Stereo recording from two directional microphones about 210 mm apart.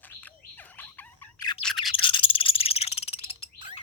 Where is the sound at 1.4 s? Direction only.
20° left (ahead or behind).